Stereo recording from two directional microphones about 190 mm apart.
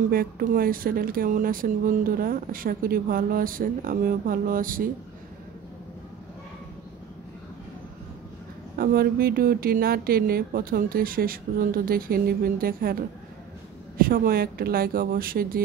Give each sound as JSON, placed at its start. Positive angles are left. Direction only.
{"t": 0.1, "sound": "speech", "side_deg": -50}
{"t": 8.7, "sound": "speech", "side_deg": -55}